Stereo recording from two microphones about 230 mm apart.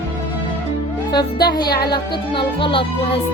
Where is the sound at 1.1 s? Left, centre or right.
Centre.